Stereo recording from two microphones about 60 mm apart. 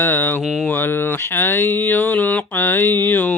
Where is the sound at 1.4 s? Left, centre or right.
Left.